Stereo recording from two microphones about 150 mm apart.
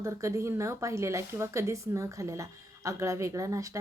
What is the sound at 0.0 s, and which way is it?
Speech, 20° right (ahead or behind).